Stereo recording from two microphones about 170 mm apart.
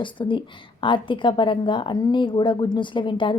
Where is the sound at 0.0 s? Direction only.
30° left (ahead or behind).